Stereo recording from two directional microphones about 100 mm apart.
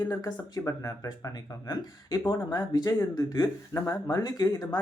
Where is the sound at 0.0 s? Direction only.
40° left (ahead or behind).